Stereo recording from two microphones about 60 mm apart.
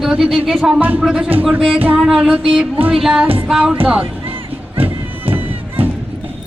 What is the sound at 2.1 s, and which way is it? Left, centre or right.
Speech, right.